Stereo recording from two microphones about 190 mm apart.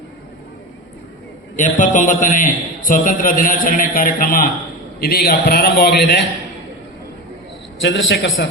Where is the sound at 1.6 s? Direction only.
40° left (ahead or behind); by 6.3 s 60° left (ahead or behind).